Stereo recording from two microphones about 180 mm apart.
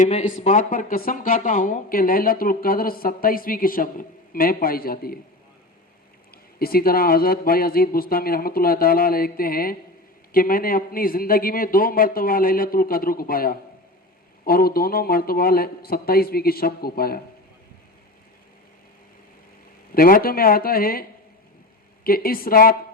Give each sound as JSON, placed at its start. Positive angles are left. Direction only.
{"t": 0.0, "sound": "speech", "side_deg": 40}
{"t": 6.3, "sound": "speech", "side_deg": 55}
{"t": 19.9, "sound": "speech", "side_deg": 55}